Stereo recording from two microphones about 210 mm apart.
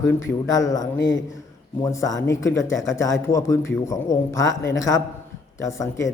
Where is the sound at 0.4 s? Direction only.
15° left (ahead or behind).